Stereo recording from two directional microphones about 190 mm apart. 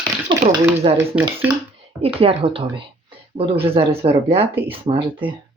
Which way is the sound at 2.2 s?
30° right (ahead or behind).